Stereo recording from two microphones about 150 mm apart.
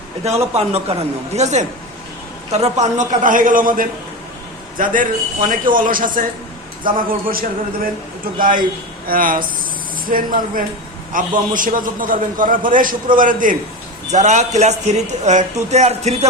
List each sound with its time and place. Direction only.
0.3 s a man's voice: 45° right (ahead or behind); by 13.6 s 65° right (ahead or behind)
14.1 s a man's voice: 50° right (ahead or behind)